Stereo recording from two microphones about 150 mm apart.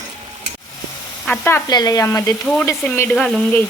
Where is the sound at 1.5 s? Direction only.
15° left (ahead or behind).